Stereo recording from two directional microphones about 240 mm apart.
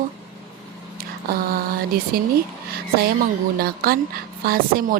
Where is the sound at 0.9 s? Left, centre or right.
Right.